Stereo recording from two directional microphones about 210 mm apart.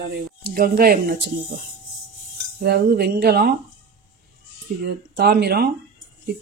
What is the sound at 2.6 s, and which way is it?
Speech, 45° right (ahead or behind).